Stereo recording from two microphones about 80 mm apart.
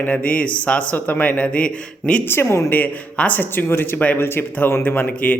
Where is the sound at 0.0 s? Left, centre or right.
Centre.